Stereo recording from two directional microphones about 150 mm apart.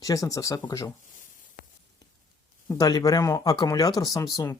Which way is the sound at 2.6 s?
25° left (ahead or behind).